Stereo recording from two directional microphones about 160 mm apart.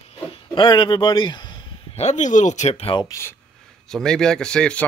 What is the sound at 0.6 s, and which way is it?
Speech, 30° left (ahead or behind).